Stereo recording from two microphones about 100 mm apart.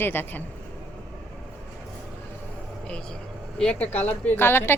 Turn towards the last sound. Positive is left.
turn(degrees=20)  # may be behind; listen again after turning